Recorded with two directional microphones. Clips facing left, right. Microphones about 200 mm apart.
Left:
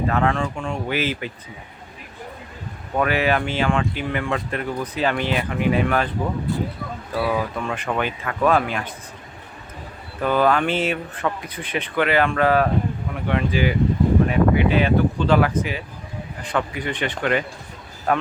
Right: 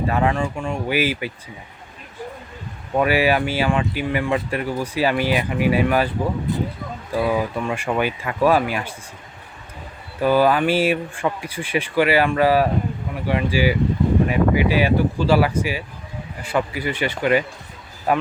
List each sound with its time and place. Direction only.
0.1 s speech: 10° right (ahead or behind)
3.0 s speech: 10° right (ahead or behind)
6.5 s speech: 20° right (ahead or behind)
10.2 s speech: 5° right (ahead or behind)